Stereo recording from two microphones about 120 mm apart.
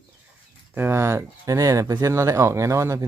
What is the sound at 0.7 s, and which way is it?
Speech, 20° right (ahead or behind).